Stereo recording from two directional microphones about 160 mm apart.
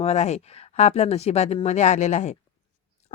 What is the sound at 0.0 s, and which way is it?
A woman's voice, 45° left (ahead or behind).